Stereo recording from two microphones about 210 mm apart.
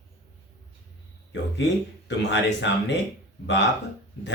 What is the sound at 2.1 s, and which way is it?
Speech, 60° left (ahead or behind).